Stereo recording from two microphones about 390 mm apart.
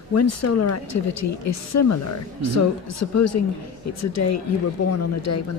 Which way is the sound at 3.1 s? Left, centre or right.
Left.